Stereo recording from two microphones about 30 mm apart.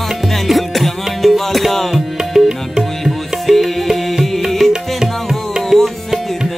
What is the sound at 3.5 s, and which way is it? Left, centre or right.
Music, centre.